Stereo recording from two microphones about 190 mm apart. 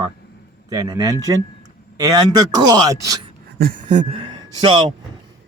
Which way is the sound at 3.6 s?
40° right (ahead or behind).